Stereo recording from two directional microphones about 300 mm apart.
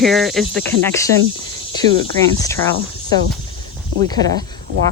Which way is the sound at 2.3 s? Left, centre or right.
Centre.